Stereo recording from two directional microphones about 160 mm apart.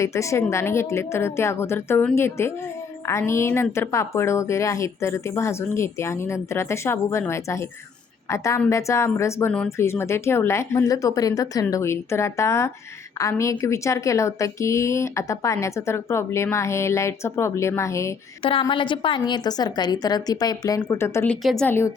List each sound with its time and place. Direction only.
0.0 s a woman's voice: 20° left (ahead or behind)
18.6 s a woman's voice: 30° left (ahead or behind); by 21.3 s 15° left (ahead or behind)
21.4 s a woman's voice: centre (ahead or behind)
21.7 s a woman's voice: 15° left (ahead or behind)